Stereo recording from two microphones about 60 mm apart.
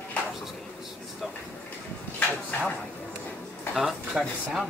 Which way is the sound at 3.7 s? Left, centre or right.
Centre.